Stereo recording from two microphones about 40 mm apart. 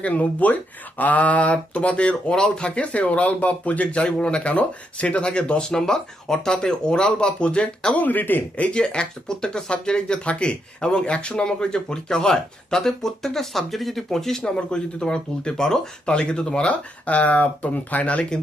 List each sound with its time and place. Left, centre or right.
0.0 s speech: left
3.9 s speech: left
7.9 s speech: left
8.5 s speech: left
8.8 s speech: left
14.4 s speech: left